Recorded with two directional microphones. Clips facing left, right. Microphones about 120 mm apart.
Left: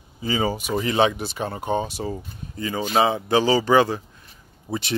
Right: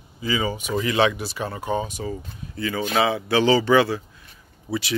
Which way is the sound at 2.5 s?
25° left (ahead or behind).